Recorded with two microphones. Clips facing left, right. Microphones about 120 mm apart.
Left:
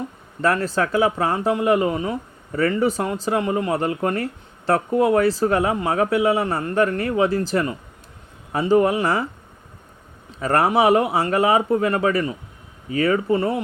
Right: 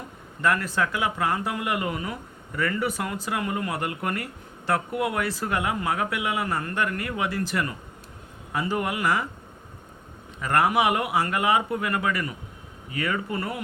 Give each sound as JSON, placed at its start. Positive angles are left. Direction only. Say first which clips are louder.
{"t": 0.4, "sound": "speech", "louder": "left 4 dB", "side_deg": 30}
{"t": 10.4, "sound": "speech", "louder": "left 5 dB", "side_deg": 30}